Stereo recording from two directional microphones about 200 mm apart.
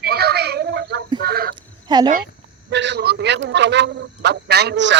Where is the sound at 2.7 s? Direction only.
60° right (ahead or behind).